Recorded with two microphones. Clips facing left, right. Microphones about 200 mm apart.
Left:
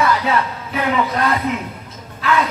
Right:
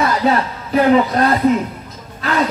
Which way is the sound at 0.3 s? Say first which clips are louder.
Right 3 dB; 35° right (ahead or behind).